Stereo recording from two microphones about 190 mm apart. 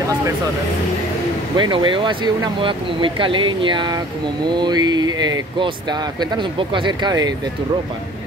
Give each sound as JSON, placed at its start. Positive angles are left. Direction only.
{"t": 1.6, "sound": "speech", "side_deg": -25}